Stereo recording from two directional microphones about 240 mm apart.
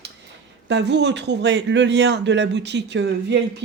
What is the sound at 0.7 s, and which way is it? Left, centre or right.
Speech, right.